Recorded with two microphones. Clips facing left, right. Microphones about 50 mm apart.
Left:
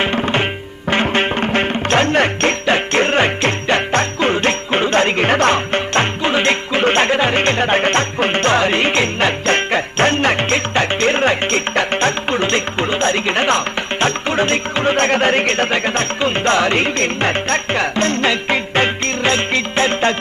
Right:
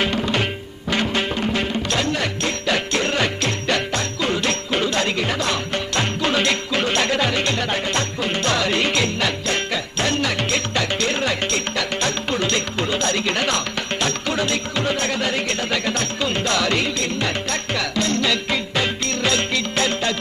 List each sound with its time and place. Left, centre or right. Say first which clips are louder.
0.0 s tabla: left 4 dB; left
0.9 s music: left 5 dB; left